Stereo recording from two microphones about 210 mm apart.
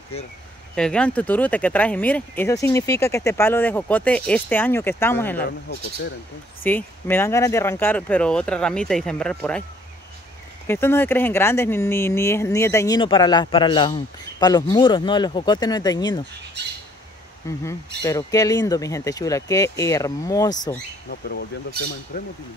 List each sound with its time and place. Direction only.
0.1 s speech: 30° left (ahead or behind)
0.7 s speech: 5° left (ahead or behind)
6.6 s speech: 10° left (ahead or behind)
10.7 s speech: 10° left (ahead or behind)
17.5 s speech: 15° left (ahead or behind)
21.1 s speech: 50° left (ahead or behind)